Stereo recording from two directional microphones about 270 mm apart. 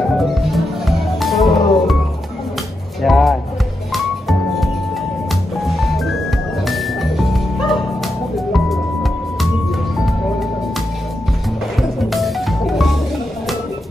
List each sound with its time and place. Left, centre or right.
0.2 s music: centre
3.0 s music: centre
12.0 s music: centre